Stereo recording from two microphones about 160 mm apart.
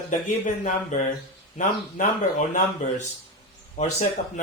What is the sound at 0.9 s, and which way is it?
Speech, 50° left (ahead or behind).